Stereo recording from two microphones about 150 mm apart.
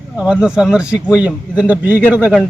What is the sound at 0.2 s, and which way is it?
A man's voice, 5° right (ahead or behind).